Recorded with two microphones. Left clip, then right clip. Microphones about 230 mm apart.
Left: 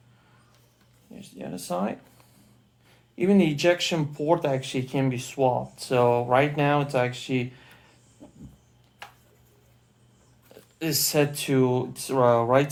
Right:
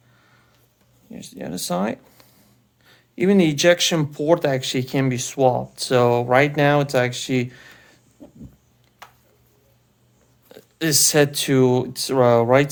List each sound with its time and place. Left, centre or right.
1.1 s speech: right
3.2 s speech: right
8.2 s a sound: right
10.5 s speech: right